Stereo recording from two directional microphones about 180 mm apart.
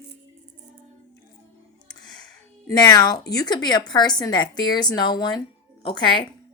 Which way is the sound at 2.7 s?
20° left (ahead or behind).